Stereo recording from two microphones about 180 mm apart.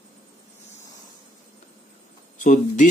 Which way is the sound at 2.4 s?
45° left (ahead or behind).